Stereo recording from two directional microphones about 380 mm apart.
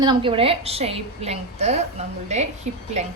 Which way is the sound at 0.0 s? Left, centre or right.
Centre.